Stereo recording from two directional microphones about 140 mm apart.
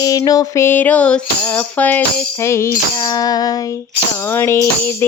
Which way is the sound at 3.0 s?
30° left (ahead or behind).